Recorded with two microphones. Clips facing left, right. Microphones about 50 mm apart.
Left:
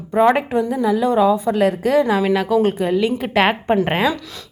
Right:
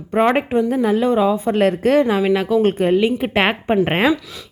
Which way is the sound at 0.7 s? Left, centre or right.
Right.